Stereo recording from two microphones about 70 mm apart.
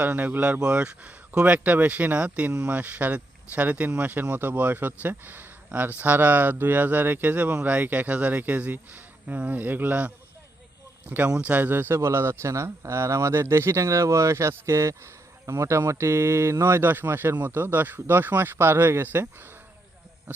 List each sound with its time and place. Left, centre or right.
0.0 s speech: right
11.3 s speech: right
11.9 s speech: right